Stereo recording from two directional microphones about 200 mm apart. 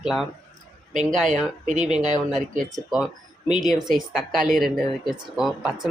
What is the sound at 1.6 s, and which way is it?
Speech, 35° right (ahead or behind).